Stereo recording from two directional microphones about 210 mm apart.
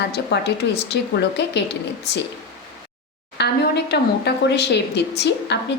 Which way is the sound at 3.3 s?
50° left (ahead or behind).